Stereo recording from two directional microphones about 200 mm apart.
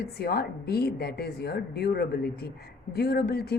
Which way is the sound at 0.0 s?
50° left (ahead or behind).